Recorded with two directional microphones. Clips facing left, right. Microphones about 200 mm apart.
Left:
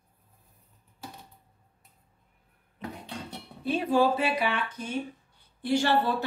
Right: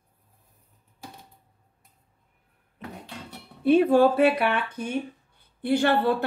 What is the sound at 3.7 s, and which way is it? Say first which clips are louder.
Speech: right 7 dB; 55° right (ahead or behind).